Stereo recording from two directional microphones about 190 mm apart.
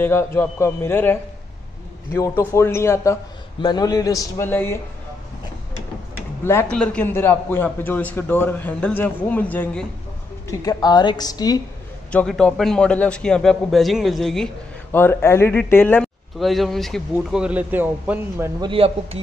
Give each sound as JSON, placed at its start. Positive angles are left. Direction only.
{"t": 0.0, "sound": "a man's voice", "side_deg": 10}
{"t": 6.4, "sound": "a man's voice", "side_deg": 15}
{"t": 10.6, "sound": "a man's voice", "side_deg": 20}
{"t": 12.1, "sound": "a man's voice", "side_deg": 5}
{"t": 16.3, "sound": "a man's voice", "side_deg": 0}
{"t": 18.6, "sound": "a man's voice", "side_deg": -30}